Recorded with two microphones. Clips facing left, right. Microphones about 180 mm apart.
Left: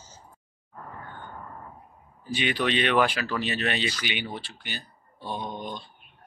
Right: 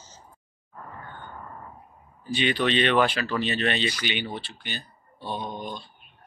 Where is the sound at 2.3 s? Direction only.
10° left (ahead or behind).